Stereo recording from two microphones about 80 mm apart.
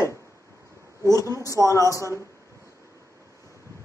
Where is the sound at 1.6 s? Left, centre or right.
Left.